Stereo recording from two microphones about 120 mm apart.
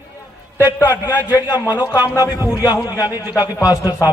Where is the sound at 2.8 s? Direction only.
30° left (ahead or behind).